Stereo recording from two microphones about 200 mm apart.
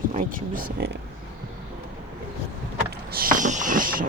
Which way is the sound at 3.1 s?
45° right (ahead or behind).